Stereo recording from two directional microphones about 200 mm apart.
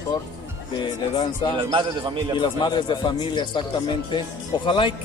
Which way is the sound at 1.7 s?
20° right (ahead or behind).